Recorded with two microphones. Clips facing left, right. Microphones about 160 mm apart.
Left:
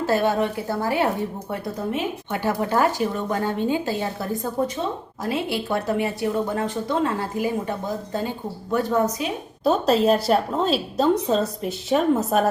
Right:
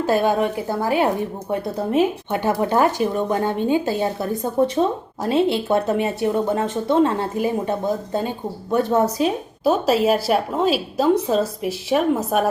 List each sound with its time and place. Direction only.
0.0 s a woman's voice: 15° right (ahead or behind)
2.3 s speech: 20° right (ahead or behind)
9.6 s a woman's voice: 5° right (ahead or behind)